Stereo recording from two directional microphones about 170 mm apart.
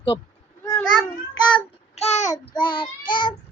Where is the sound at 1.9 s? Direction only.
40° left (ahead or behind).